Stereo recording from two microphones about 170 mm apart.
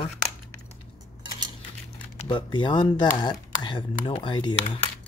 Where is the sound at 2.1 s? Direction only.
30° left (ahead or behind).